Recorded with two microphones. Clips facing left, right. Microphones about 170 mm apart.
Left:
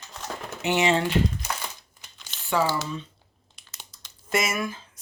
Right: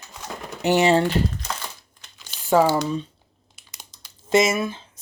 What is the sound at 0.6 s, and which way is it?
Speech, 40° right (ahead or behind).